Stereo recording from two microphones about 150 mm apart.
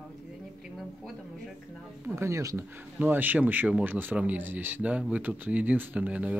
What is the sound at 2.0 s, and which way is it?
A woman's voice, 20° right (ahead or behind).